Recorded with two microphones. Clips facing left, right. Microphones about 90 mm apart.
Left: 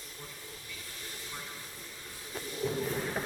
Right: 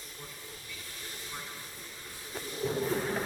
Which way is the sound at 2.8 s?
20° right (ahead or behind).